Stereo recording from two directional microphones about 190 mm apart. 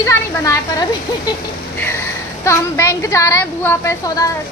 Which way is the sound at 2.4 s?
15° left (ahead or behind).